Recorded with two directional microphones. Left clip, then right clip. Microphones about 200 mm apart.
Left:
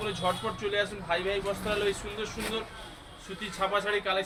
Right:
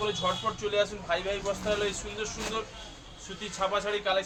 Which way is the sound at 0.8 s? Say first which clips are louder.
Right 1 dB; 20° right (ahead or behind).